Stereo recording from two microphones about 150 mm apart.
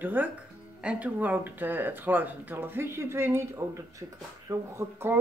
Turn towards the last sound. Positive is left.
turn(degrees=-15)  # may be behind; listen again after turning